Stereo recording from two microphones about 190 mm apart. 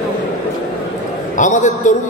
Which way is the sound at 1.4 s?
40° left (ahead or behind).